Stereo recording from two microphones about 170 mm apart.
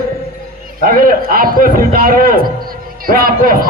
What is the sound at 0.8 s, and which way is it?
A man's voice, 60° right (ahead or behind).